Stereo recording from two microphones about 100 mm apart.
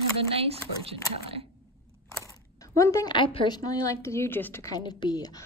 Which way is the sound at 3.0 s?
55° left (ahead or behind).